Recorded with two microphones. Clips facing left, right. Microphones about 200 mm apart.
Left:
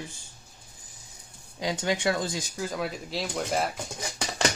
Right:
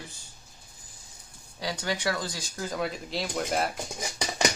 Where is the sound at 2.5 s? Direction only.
Centre (ahead or behind).